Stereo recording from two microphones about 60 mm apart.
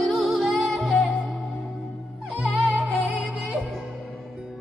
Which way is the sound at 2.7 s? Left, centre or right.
Right.